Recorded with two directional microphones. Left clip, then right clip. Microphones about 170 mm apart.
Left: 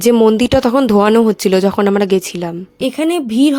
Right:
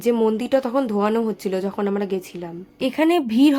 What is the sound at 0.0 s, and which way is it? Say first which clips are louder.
Speech: left 9 dB; 50° left (ahead or behind).